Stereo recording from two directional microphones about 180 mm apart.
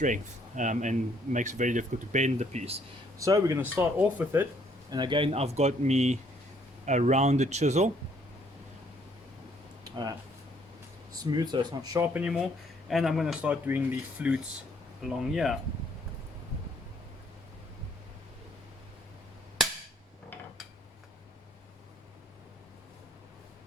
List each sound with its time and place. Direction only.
0.0 s speech: 45° right (ahead or behind)
3.2 s speech: 20° right (ahead or behind)
4.9 s speech: 25° right (ahead or behind)
9.8 s a sound: 20° right (ahead or behind)
11.1 s speech: 20° right (ahead or behind)
12.1 s speech: 5° right (ahead or behind)